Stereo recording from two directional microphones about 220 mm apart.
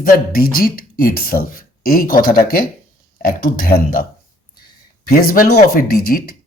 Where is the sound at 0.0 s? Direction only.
40° left (ahead or behind).